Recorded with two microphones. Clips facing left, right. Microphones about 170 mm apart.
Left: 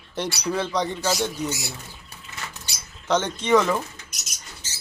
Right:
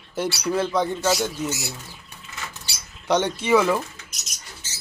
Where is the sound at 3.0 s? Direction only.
10° right (ahead or behind).